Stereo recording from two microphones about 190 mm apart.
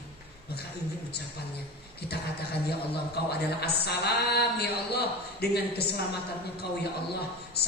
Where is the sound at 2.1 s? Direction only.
60° left (ahead or behind).